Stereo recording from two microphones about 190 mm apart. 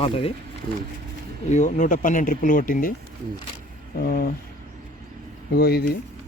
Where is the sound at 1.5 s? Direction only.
40° left (ahead or behind).